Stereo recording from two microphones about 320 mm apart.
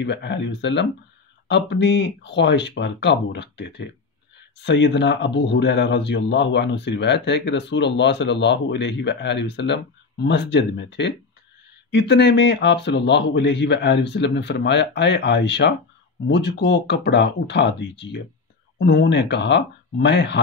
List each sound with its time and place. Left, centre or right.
0.0 s speech: left